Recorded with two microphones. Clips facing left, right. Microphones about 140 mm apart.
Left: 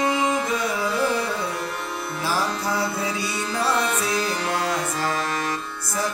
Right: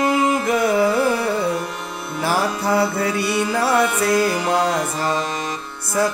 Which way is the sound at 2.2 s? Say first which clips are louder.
Right 5 dB; 65° right (ahead or behind).